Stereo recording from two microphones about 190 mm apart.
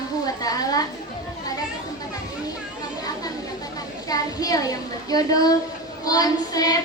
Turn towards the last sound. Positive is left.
turn(degrees=20)  # may be behind; listen again after turning